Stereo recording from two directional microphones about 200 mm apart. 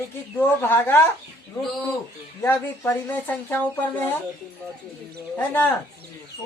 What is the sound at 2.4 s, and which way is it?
Speech, 10° left (ahead or behind).